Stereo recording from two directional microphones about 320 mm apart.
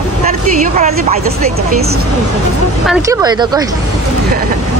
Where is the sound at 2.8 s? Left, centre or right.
Centre.